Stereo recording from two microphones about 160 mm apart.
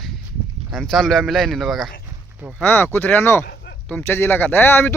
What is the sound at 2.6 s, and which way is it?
Speech, 10° left (ahead or behind).